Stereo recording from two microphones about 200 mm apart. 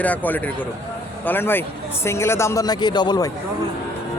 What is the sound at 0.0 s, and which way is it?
Speech, 10° left (ahead or behind).